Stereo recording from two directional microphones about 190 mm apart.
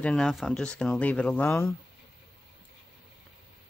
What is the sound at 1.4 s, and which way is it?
Speech, 15° left (ahead or behind).